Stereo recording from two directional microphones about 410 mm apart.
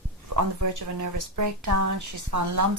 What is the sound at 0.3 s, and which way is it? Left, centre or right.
Speech, right.